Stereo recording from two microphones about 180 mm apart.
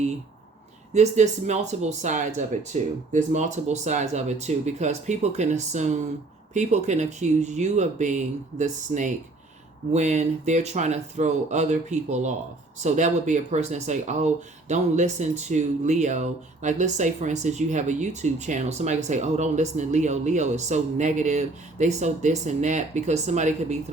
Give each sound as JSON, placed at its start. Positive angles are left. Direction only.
{"t": 0.9, "sound": "speech", "side_deg": -40}